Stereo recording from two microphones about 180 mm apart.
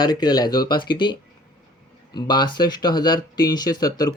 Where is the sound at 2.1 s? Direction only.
25° left (ahead or behind).